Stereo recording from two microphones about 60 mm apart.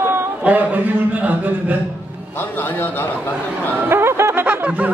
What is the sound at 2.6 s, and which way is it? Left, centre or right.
Speech, left.